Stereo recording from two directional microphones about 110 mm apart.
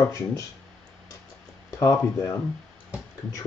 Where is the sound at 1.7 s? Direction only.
25° left (ahead or behind).